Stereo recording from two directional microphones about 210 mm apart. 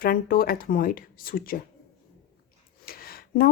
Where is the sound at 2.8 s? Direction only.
45° left (ahead or behind).